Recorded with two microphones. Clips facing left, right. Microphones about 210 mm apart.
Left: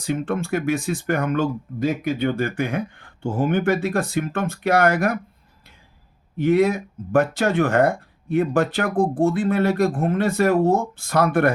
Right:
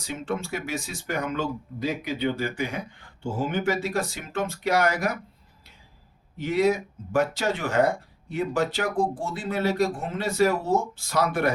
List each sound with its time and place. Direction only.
0.0 s speech: 55° left (ahead or behind)
6.3 s speech: 55° left (ahead or behind)